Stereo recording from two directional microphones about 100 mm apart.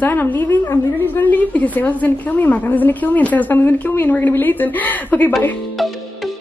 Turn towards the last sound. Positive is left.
turn(degrees=15)  # may be behind; listen again after turning